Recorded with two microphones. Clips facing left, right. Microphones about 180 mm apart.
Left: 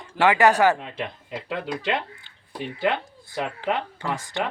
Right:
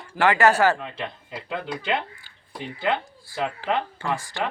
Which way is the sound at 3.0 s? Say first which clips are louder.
Right 1 dB; 20° left (ahead or behind).